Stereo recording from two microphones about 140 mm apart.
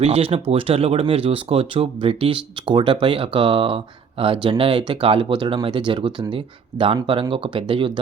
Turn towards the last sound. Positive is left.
turn(degrees=-35)  # may be behind; listen again after turning